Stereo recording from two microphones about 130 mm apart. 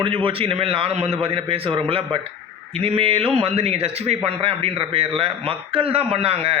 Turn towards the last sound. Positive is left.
turn(degrees=-50)  # may be behind; listen again after turning